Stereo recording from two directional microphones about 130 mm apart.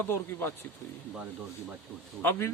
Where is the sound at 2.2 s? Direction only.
20° left (ahead or behind).